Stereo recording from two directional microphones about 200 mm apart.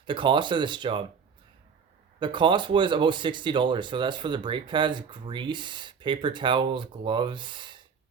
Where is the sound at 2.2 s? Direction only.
25° right (ahead or behind).